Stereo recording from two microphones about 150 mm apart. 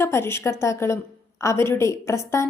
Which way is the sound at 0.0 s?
15° left (ahead or behind).